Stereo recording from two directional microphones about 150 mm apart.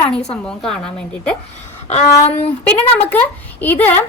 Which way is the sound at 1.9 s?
45° left (ahead or behind).